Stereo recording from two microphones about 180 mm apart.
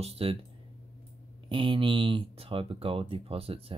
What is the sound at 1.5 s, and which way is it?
Speech, 25° right (ahead or behind).